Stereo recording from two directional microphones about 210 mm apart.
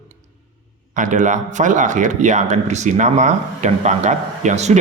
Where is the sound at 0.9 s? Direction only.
35° right (ahead or behind).